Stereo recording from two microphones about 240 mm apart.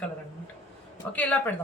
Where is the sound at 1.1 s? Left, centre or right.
Centre.